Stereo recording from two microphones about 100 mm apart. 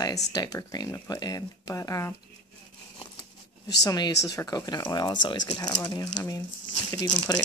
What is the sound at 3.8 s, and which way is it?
Speech, 40° left (ahead or behind).